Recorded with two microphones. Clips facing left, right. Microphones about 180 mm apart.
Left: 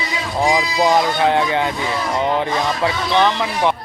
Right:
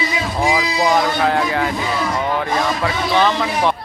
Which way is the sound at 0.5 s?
20° left (ahead or behind).